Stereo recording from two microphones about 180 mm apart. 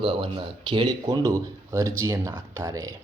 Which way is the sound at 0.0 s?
30° right (ahead or behind).